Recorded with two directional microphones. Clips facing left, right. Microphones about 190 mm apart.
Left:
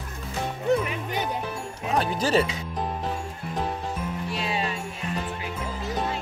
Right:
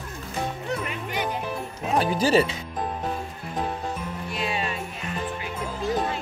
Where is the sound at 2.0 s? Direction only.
5° right (ahead or behind).